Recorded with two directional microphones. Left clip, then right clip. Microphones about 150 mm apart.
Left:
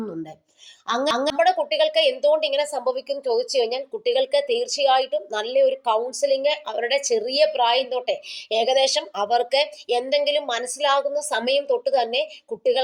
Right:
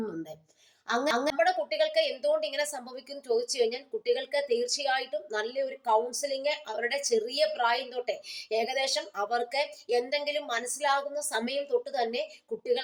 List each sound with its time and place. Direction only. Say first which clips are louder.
0.9 s a woman's voice: left 6 dB; 30° left (ahead or behind)